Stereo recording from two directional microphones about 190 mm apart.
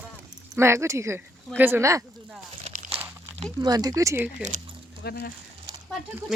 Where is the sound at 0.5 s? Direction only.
15° right (ahead or behind).